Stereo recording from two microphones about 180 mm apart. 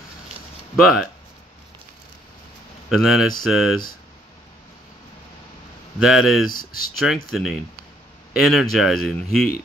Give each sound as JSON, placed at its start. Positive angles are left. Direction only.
{"t": 0.7, "sound": "speech", "side_deg": 0}
{"t": 2.9, "sound": "speech", "side_deg": 0}
{"t": 5.9, "sound": "speech", "side_deg": 0}
{"t": 6.5, "sound": "speech", "side_deg": 50}
{"t": 7.0, "sound": "speech", "side_deg": 0}